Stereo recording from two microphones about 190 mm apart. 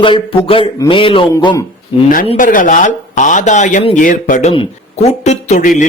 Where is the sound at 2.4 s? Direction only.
45° left (ahead or behind).